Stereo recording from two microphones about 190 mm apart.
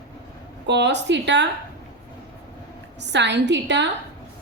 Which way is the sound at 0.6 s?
65° right (ahead or behind).